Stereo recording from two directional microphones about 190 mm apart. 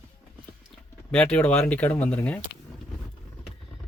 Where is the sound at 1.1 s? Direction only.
5° left (ahead or behind).